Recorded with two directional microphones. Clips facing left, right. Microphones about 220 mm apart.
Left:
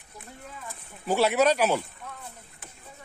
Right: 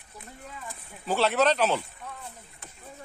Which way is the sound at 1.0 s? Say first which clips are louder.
Left 2 dB; 10° left (ahead or behind).